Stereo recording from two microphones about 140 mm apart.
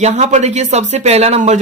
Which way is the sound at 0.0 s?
55° right (ahead or behind).